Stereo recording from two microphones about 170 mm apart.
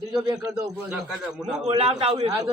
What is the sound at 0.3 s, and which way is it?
Speech, 20° right (ahead or behind).